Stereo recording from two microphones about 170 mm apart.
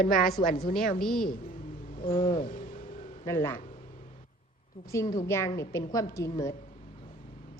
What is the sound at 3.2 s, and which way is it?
Speech, 15° left (ahead or behind).